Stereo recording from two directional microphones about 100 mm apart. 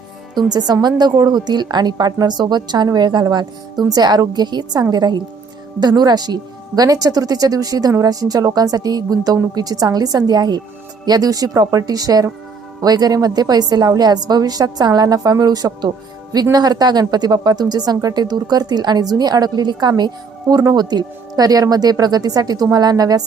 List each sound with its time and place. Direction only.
0.3 s a woman's voice: 40° right (ahead or behind)